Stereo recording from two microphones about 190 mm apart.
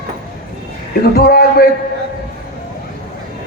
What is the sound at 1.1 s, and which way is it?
Speech, 55° left (ahead or behind).